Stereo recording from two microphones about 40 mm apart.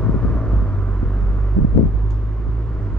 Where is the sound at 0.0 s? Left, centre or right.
Left.